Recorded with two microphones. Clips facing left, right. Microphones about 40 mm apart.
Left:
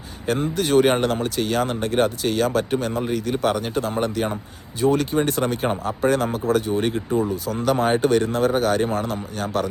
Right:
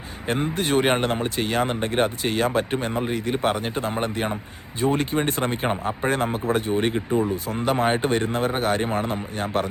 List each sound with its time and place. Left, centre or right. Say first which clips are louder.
0.3 s speech: left 2 dB; right